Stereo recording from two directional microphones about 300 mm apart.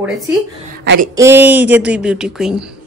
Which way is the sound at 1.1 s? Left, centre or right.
Centre.